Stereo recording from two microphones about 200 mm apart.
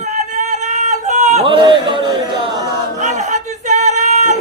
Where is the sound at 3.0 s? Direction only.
35° right (ahead or behind).